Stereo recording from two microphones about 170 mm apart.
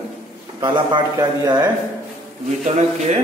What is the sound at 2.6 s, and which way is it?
Speech, 45° right (ahead or behind).